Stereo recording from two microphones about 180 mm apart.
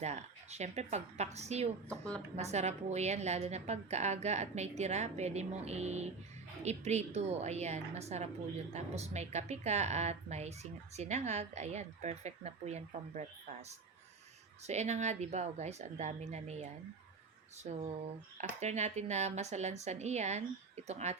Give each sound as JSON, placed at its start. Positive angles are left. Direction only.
{"t": 0.0, "sound": "a woman's voice", "side_deg": -40}
{"t": 1.9, "sound": "a woman's voice", "side_deg": 5}
{"t": 2.3, "sound": "a woman's voice", "side_deg": -40}
{"t": 14.7, "sound": "a woman's voice", "side_deg": -40}
{"t": 17.7, "sound": "a woman's voice", "side_deg": -45}